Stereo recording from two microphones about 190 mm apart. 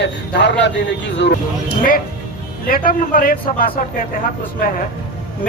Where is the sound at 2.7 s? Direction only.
50° left (ahead or behind).